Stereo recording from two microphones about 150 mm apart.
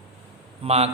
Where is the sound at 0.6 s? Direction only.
45° right (ahead or behind).